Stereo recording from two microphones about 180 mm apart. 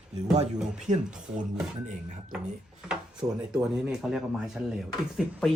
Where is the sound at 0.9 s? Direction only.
45° right (ahead or behind).